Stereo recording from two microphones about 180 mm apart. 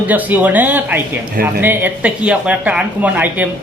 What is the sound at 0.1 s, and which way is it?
A woman's voice, 10° right (ahead or behind).